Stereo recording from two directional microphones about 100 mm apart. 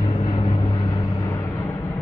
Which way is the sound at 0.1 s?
55° left (ahead or behind).